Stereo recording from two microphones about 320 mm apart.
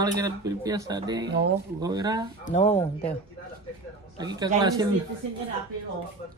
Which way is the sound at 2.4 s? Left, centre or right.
Left.